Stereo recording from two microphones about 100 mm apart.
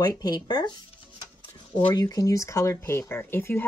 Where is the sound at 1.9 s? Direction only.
35° left (ahead or behind).